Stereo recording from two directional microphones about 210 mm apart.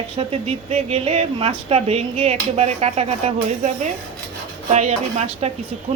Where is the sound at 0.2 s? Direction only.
30° right (ahead or behind).